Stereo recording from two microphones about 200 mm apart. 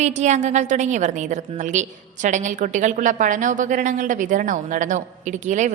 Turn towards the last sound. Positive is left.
turn(degrees=-40)  # may be behind; listen again after turning